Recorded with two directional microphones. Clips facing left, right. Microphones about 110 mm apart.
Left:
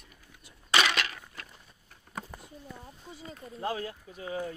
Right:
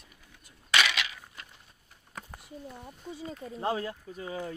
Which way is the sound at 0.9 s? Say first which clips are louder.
Left 3 dB; 50° left (ahead or behind).